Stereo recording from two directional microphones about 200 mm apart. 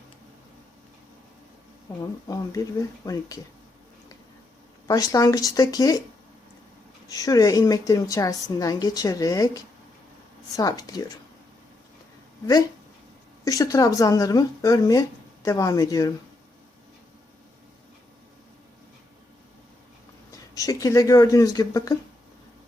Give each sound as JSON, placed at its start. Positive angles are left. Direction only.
{"t": 2.0, "sound": "a woman's voice", "side_deg": 15}
{"t": 4.9, "sound": "a woman's voice", "side_deg": 15}
{"t": 7.1, "sound": "a woman's voice", "side_deg": 15}
{"t": 10.6, "sound": "a woman's voice", "side_deg": 20}
{"t": 13.4, "sound": "a woman's voice", "side_deg": 15}
{"t": 20.3, "sound": "speech", "side_deg": 15}